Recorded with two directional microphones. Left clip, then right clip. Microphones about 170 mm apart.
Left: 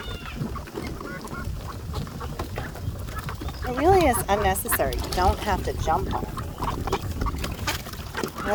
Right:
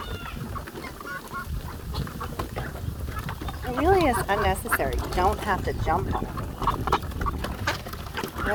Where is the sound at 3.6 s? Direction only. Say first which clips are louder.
Left 2 dB; 40° left (ahead or behind).